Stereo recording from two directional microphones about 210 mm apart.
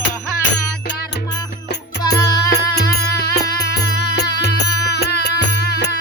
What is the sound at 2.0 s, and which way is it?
Music, 50° left (ahead or behind).